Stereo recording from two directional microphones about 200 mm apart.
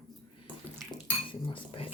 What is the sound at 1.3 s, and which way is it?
Cutlery, 25° left (ahead or behind).